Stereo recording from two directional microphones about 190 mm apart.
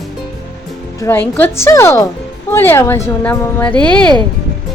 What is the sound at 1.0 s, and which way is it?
A woman's voice, 10° left (ahead or behind).